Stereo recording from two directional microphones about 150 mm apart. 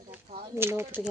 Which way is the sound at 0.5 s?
15° right (ahead or behind).